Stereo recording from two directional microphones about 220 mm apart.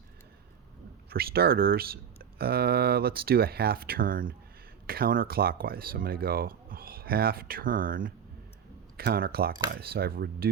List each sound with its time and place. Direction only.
1.1 s speech: 45° right (ahead or behind)